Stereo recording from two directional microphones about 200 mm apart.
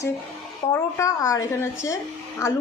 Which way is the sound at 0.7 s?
15° left (ahead or behind).